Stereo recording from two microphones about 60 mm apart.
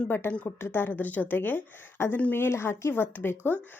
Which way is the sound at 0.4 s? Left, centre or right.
Left.